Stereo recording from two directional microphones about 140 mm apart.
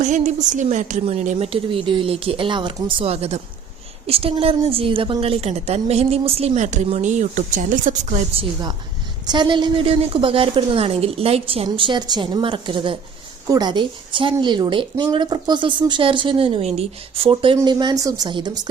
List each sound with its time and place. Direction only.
0.0 s a woman's voice: 60° right (ahead or behind)
1.5 s a woman's voice: 40° right (ahead or behind); by 8.2 s 65° right (ahead or behind)
9.2 s speech: 30° right (ahead or behind)